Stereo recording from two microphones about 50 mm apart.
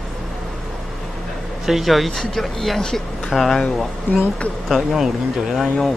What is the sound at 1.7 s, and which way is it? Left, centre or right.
Speech, centre.